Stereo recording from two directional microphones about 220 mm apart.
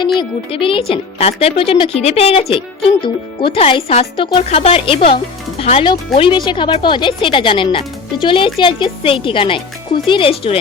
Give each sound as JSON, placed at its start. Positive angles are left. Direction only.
{"t": 0.2, "sound": "speech", "side_deg": 25}